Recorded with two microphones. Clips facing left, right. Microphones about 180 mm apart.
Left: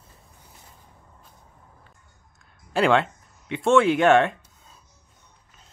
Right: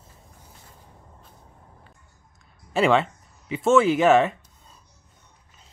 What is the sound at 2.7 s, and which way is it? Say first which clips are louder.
Speech: even; centre (ahead or behind).